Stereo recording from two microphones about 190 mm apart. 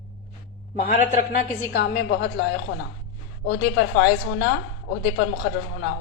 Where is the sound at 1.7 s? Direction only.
65° left (ahead or behind).